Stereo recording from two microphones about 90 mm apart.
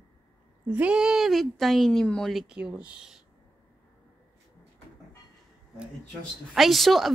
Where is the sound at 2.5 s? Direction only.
10° right (ahead or behind).